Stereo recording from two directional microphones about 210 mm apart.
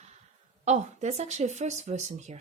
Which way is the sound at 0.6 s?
35° right (ahead or behind).